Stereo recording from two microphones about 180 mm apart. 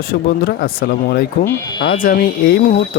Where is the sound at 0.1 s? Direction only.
55° left (ahead or behind).